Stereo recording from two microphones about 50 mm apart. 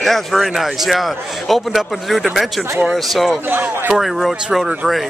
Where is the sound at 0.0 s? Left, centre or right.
Centre.